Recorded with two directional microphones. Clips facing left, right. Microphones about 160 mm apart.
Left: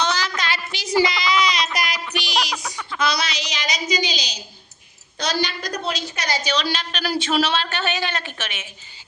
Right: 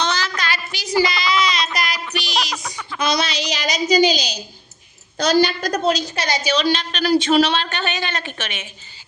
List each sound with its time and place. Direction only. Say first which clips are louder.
0.0 s a sound: right 1 dB; 10° left (ahead or behind)
0.3 s a sound: right 1 dB; 25° left (ahead or behind)
1.0 s music: right 1 dB; 20° left (ahead or behind); by 3.0 s centre (ahead or behind)
3.0 s a woman's voice: right 3 dB; 25° right (ahead or behind)
3.5 s a woman's voice: right 8 dB; 40° right (ahead or behind)
6.1 s a woman's voice: right 3 dB; 25° right (ahead or behind)
6.4 s speech: right 5 dB; centre (ahead or behind)